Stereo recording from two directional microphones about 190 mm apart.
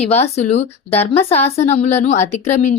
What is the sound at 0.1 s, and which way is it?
A woman's voice, 35° left (ahead or behind).